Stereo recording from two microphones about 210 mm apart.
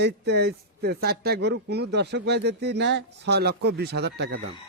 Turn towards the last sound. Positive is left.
turn(degrees=-50)  # may be behind; listen again after turning